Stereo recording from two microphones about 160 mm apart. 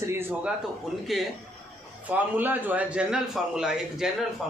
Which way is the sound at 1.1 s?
Centre (ahead or behind).